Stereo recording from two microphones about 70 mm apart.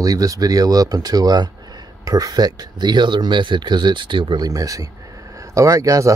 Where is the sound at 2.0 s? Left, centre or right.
Right.